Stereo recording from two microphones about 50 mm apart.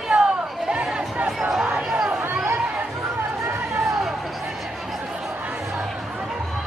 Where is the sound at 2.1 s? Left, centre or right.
Right.